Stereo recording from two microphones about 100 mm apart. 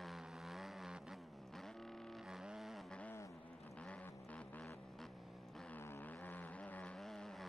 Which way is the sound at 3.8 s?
10° left (ahead or behind).